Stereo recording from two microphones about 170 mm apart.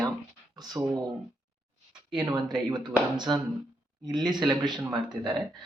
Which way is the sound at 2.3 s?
25° right (ahead or behind).